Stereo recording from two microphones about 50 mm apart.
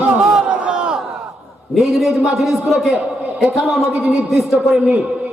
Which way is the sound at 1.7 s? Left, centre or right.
Centre.